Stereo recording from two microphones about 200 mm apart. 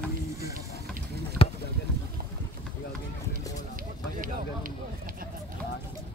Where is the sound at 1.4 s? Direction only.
30° left (ahead or behind).